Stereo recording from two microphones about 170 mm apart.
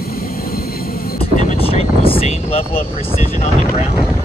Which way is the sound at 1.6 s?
35° left (ahead or behind).